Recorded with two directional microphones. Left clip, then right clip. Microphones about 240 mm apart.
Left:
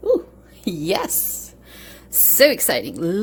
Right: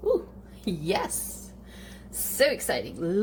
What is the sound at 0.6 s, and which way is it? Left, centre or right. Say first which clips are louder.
Speech: left 6 dB; left.